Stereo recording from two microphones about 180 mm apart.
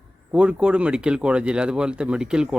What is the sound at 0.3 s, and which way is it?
Speech, 5° right (ahead or behind).